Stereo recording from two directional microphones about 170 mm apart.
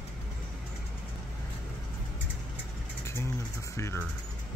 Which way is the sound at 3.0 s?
15° left (ahead or behind).